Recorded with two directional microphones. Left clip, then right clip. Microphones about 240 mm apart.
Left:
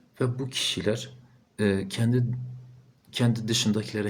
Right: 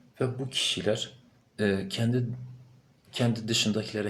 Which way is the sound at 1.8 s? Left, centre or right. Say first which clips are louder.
Left 2 dB; left.